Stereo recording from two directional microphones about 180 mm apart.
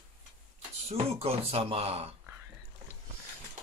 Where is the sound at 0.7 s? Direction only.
35° right (ahead or behind).